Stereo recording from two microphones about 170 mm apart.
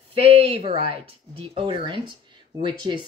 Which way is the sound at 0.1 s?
35° right (ahead or behind).